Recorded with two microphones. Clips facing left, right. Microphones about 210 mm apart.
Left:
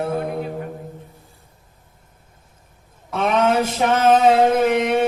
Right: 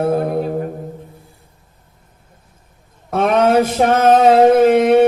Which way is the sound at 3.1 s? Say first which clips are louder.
Right 4 dB; 50° right (ahead or behind).